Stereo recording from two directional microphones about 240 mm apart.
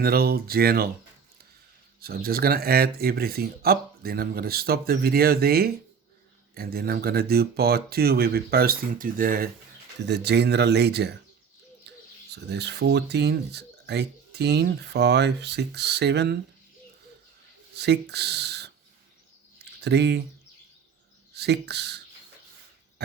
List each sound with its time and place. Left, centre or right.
0.0 s speech: right
2.0 s speech: right
12.5 s speech: right
17.7 s speech: right
19.8 s speech: right
21.3 s speech: right
23.0 s pig: right